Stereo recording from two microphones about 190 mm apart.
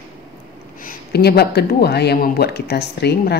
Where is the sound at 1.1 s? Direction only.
55° left (ahead or behind).